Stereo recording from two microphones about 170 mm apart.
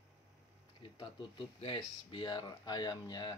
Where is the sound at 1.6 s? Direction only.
30° left (ahead or behind).